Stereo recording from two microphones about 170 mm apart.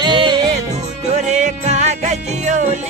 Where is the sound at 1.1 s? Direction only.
45° right (ahead or behind).